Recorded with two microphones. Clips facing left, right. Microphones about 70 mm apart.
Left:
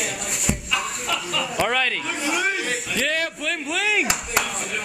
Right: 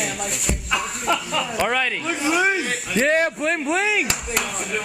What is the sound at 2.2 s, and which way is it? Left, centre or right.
Speech, right.